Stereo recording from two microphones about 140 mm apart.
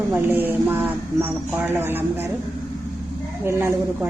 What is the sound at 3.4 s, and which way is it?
Speech, 20° right (ahead or behind).